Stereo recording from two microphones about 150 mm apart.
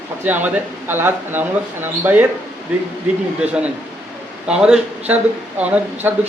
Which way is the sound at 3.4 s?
10° right (ahead or behind).